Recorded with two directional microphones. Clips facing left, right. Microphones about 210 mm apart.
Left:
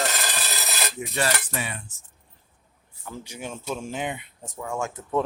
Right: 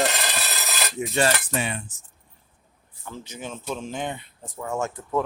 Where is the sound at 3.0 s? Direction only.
10° left (ahead or behind).